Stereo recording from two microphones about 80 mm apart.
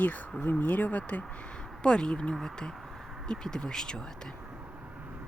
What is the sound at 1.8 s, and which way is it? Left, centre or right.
Speech, centre.